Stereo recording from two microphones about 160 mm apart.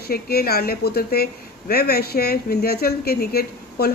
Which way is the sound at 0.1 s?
75° left (ahead or behind).